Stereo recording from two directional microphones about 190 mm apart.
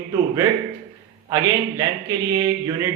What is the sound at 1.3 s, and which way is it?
Speech, 15° right (ahead or behind).